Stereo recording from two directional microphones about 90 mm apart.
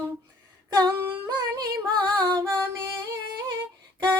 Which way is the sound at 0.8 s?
40° right (ahead or behind).